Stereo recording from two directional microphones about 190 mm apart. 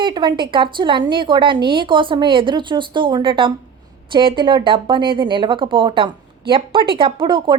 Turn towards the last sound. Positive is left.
turn(degrees=-25)  # may be behind; listen again after turning